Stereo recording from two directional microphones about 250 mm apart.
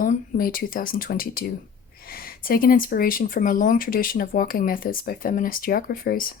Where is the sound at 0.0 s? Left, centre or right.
Left.